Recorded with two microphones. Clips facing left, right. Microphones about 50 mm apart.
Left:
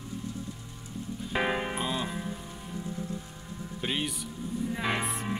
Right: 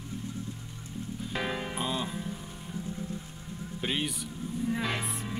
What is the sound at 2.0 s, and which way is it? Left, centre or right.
Music, centre.